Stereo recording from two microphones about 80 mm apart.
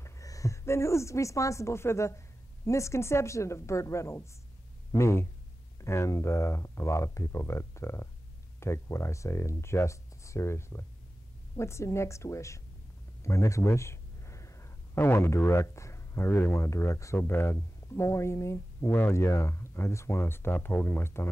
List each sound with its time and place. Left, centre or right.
0.0 s speech: left
13.2 s a sound: left
16.3 s speech: left
16.5 s speech: left